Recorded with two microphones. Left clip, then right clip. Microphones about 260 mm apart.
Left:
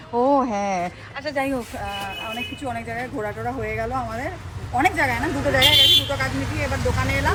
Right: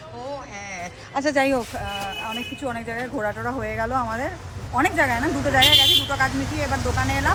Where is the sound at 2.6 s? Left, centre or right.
Centre.